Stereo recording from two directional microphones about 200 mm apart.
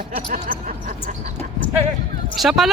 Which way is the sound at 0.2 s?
45° right (ahead or behind).